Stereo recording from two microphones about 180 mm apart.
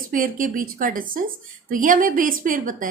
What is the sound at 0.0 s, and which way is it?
A woman's voice, 50° right (ahead or behind).